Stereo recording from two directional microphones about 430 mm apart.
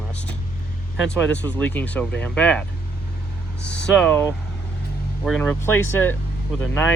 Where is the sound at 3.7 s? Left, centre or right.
Centre.